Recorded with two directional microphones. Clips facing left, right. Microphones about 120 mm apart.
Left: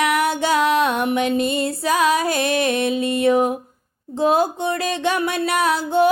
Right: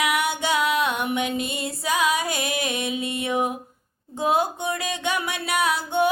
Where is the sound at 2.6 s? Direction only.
15° right (ahead or behind).